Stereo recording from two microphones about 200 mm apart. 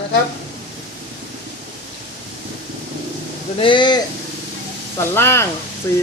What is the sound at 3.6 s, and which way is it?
Speech, 25° left (ahead or behind).